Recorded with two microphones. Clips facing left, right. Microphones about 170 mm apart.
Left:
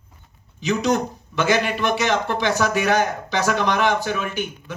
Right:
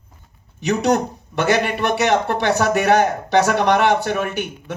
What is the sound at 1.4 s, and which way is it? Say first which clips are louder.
A man's voice: right 2 dB; 55° right (ahead or behind).